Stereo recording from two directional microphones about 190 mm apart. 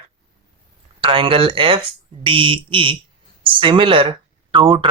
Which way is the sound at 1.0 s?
30° right (ahead or behind).